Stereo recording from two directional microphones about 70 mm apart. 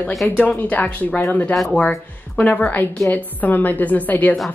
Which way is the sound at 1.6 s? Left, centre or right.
Centre.